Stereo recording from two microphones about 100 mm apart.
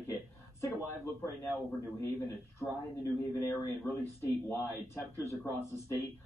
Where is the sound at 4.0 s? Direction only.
25° left (ahead or behind).